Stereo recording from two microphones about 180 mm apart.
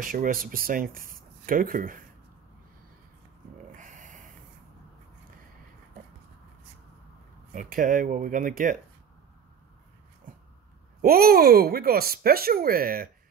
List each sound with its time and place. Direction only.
0.0 s speech: 50° right (ahead or behind)
3.7 s a sound: 45° right (ahead or behind)
7.5 s speech: 50° right (ahead or behind)
11.0 s speech: 55° right (ahead or behind)